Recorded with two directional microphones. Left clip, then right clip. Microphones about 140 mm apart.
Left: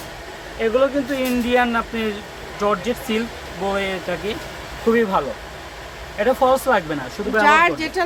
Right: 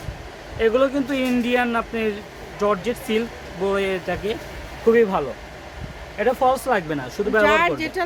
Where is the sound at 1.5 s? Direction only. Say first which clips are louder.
Left 4 dB; 50° right (ahead or behind).